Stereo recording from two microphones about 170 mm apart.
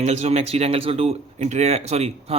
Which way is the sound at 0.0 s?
40° right (ahead or behind).